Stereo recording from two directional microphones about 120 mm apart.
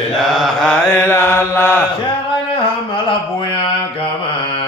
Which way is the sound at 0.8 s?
20° left (ahead or behind).